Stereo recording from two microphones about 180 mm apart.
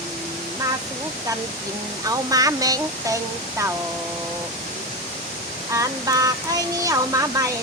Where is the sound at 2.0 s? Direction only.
20° right (ahead or behind).